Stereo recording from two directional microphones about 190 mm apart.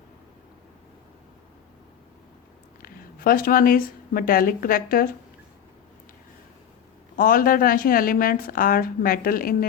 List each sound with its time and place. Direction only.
2.8 s speech: 50° left (ahead or behind)
7.2 s a woman's voice: 50° left (ahead or behind)